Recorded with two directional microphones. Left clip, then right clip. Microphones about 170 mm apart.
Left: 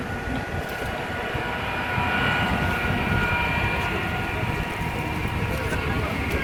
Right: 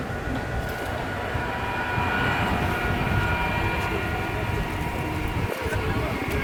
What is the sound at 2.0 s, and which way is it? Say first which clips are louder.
Train: left 2 dB; 20° left (ahead or behind).